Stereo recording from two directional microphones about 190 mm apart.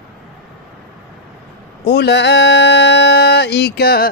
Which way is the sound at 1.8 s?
60° left (ahead or behind).